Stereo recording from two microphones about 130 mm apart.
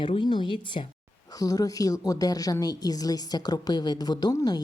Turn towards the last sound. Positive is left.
turn(degrees=30)  # may be behind; listen again after turning